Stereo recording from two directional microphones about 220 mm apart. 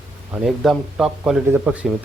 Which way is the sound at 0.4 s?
Centre (ahead or behind).